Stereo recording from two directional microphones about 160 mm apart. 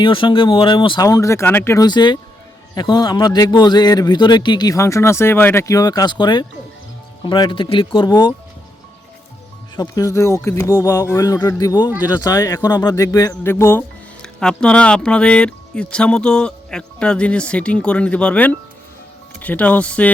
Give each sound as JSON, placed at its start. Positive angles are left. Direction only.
{"t": 0.0, "sound": "speech", "side_deg": 30}
{"t": 9.7, "sound": "speech", "side_deg": 20}